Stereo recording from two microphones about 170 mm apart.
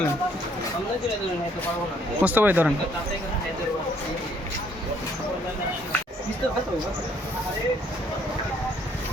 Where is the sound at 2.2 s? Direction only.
10° right (ahead or behind).